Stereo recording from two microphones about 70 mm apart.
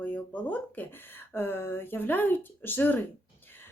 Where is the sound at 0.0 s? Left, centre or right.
Left.